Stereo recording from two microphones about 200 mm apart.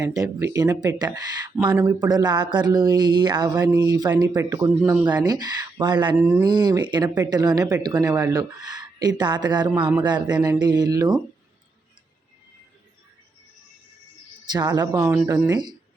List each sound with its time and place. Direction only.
0.0 s speech: 15° right (ahead or behind)
6.2 s speech: 10° right (ahead or behind)
14.5 s speech: 20° right (ahead or behind)